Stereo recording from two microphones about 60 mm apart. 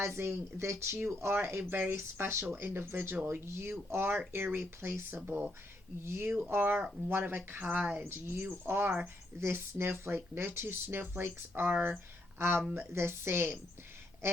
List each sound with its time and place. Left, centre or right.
0.0 s speech: right
11.7 s speech: right
12.4 s speech: right